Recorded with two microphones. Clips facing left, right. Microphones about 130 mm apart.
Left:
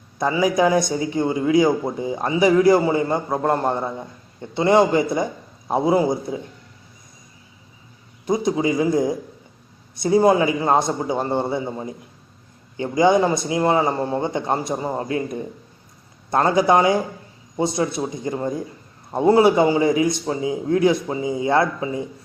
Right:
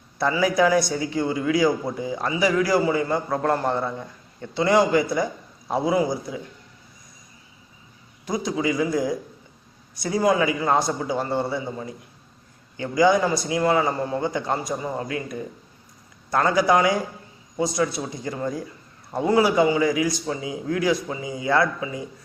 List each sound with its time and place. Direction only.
0.2 s a man's voice: 20° left (ahead or behind)
8.3 s a man's voice: 25° left (ahead or behind)